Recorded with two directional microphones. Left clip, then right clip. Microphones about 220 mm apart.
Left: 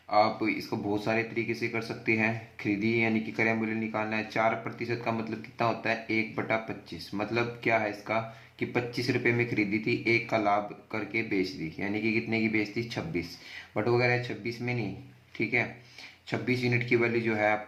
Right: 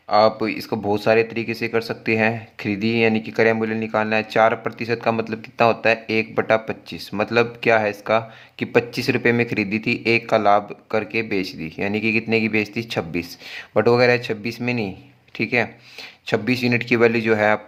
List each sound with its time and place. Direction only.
0.1 s speech: 45° right (ahead or behind)